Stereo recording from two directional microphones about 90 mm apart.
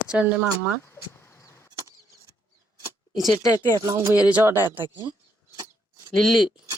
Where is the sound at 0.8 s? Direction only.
30° left (ahead or behind).